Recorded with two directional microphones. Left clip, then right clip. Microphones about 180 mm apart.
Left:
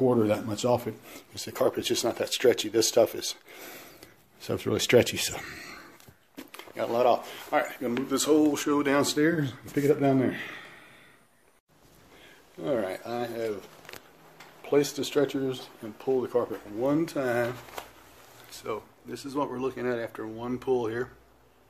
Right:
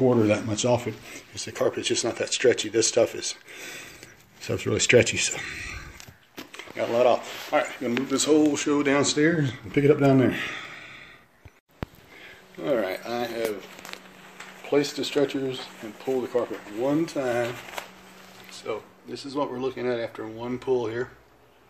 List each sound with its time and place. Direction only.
0.0 s speech: 15° left (ahead or behind)
9.8 s speech: 10° right (ahead or behind)
12.5 s speech: centre (ahead or behind)
14.7 s speech: 10° left (ahead or behind)
18.5 s speech: 5° left (ahead or behind)